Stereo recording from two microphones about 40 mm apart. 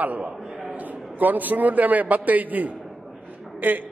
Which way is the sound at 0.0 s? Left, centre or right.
Right.